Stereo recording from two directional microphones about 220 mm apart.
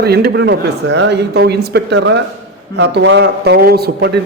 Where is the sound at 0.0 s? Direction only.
45° right (ahead or behind).